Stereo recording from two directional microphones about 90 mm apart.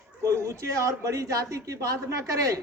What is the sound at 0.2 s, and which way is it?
Speech, 35° right (ahead or behind).